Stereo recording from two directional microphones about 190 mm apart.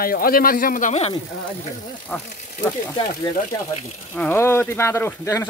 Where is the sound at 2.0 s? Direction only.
15° left (ahead or behind).